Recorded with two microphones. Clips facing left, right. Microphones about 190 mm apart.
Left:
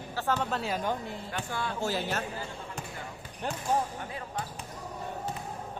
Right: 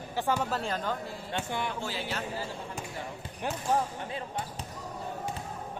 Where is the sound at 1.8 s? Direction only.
45° left (ahead or behind).